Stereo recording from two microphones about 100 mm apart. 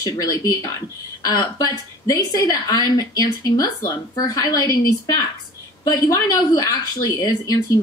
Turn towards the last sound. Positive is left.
turn(degrees=40)  # may be behind; listen again after turning